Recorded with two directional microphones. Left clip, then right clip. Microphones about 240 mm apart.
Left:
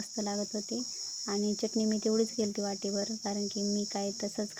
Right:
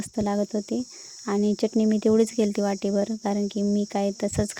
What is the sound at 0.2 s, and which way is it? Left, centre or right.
Speech, right.